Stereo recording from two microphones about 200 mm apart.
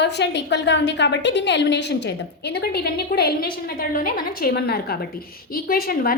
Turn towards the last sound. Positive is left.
turn(degrees=45)  # may be behind; listen again after turning